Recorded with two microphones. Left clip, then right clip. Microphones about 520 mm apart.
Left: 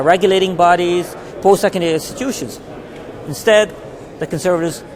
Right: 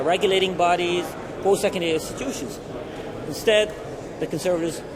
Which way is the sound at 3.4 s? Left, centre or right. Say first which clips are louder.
Left 8 dB; left.